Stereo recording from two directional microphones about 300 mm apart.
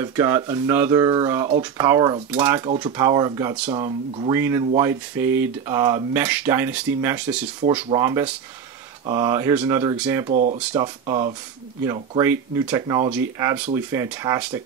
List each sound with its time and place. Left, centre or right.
0.0 s speech: centre
3.7 s speech: centre
10.2 s speech: right
10.7 s speech: centre